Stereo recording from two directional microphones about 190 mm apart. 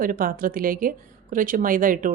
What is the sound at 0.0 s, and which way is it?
Speech, 45° right (ahead or behind).